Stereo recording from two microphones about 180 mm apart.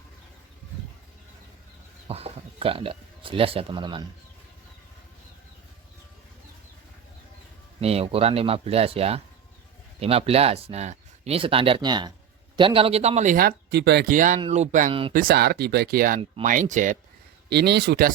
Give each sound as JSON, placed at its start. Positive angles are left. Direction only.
{"t": 2.0, "sound": "speech", "side_deg": -35}
{"t": 7.8, "sound": "speech", "side_deg": -35}
{"t": 14.1, "sound": "speech", "side_deg": -45}
{"t": 15.1, "sound": "speech", "side_deg": -55}
{"t": 17.5, "sound": "speech", "side_deg": -65}